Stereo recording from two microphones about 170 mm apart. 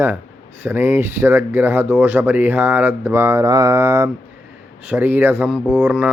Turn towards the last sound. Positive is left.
turn(degrees=-10)  # may be behind; listen again after turning